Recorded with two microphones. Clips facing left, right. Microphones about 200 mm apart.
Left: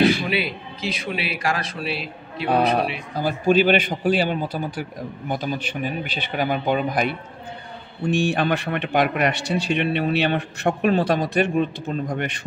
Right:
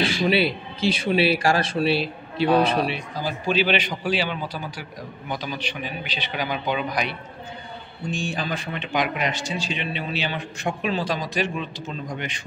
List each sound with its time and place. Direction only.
0.0 s a sound: 50° left (ahead or behind)
0.3 s a man's voice: 30° right (ahead or behind)
3.2 s a man's voice: 50° left (ahead or behind)
8.1 s a man's voice: 65° left (ahead or behind)